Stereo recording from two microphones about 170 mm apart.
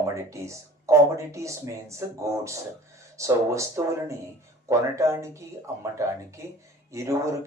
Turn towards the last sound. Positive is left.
turn(degrees=-15)  # may be behind; listen again after turning